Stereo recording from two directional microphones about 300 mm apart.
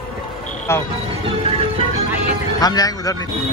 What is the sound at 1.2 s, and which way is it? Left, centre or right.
Music, centre.